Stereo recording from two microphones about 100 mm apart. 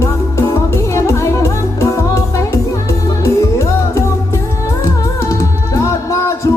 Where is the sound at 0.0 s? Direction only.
30° left (ahead or behind).